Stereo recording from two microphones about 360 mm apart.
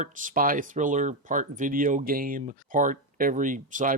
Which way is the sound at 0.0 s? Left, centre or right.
Right.